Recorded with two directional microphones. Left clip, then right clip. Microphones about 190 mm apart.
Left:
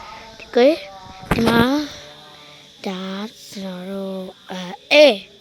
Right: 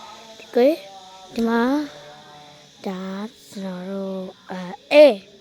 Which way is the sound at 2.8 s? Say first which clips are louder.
Left 2 dB; centre (ahead or behind).